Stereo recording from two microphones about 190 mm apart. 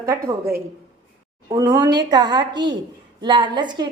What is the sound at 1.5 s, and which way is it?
A woman's voice, 20° right (ahead or behind).